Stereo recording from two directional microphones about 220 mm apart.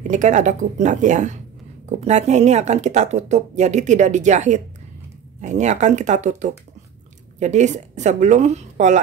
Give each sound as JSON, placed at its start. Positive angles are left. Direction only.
{"t": 0.1, "sound": "speech", "side_deg": -35}